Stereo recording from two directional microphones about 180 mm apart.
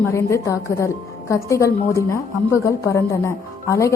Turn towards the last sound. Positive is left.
turn(degrees=15)  # may be behind; listen again after turning